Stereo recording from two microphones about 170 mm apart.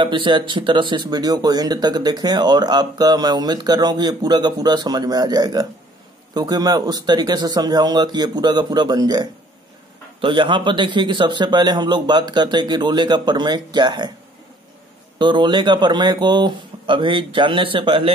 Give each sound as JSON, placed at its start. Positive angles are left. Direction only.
{"t": 0.0, "sound": "speech", "side_deg": -30}
{"t": 15.1, "sound": "speech", "side_deg": -25}